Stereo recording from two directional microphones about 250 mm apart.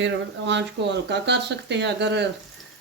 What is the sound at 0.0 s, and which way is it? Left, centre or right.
Speech, right.